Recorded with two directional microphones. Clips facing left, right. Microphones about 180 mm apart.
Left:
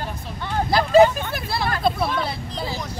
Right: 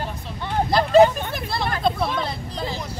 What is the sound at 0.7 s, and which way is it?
Speech, 5° left (ahead or behind).